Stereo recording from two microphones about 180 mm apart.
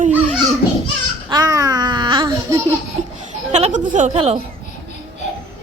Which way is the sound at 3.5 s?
40° right (ahead or behind).